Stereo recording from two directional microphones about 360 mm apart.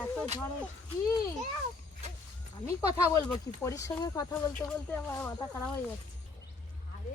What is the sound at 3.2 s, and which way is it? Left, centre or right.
Speech, centre.